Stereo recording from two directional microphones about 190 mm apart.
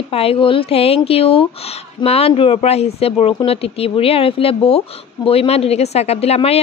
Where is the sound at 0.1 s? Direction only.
30° left (ahead or behind).